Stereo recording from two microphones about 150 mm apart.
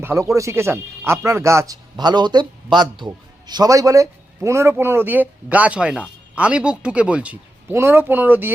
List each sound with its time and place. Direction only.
0.0 s speech: 20° right (ahead or behind)